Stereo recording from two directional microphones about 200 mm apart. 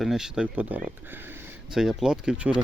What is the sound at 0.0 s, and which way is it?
Speech, centre (ahead or behind).